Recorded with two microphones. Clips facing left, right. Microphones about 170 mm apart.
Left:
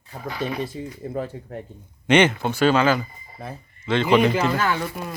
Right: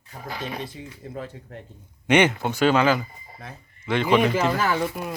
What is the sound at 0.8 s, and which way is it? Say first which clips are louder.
Speech: left 6 dB; 45° left (ahead or behind).